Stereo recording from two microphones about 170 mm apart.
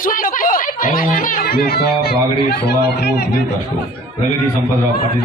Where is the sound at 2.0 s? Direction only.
70° left (ahead or behind).